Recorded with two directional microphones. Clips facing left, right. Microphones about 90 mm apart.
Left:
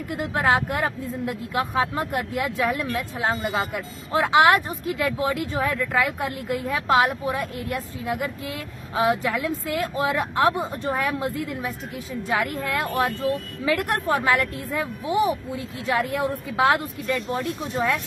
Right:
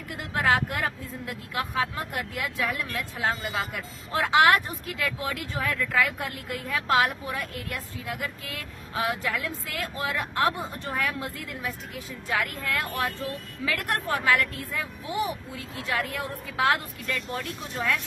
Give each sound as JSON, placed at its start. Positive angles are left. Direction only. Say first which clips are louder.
{"t": 0.1, "sound": "speech", "louder": "left 3 dB", "side_deg": 25}